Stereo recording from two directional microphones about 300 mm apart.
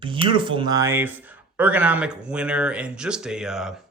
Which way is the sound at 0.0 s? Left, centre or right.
Centre.